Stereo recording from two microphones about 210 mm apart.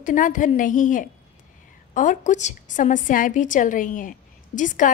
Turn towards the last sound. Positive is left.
turn(degrees=40)  # may be behind; listen again after turning